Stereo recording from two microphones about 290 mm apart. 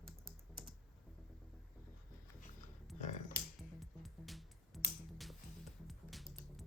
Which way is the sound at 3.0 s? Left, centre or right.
Left.